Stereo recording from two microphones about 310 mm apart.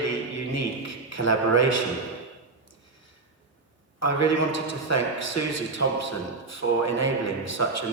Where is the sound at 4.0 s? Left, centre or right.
Left.